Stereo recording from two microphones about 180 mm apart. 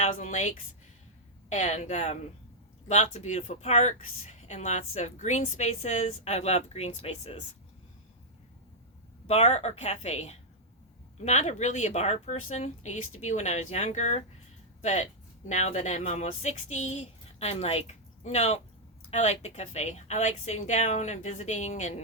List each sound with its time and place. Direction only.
0.0 s speech: 40° left (ahead or behind)
9.2 s speech: 35° left (ahead or behind)